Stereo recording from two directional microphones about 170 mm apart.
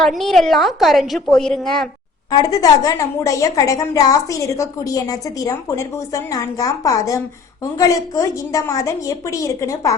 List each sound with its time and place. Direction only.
0.0 s a woman's voice: centre (ahead or behind)
2.3 s a woman's voice: 20° left (ahead or behind)